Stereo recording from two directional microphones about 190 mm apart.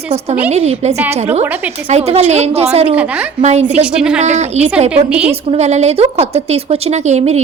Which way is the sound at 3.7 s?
5° right (ahead or behind).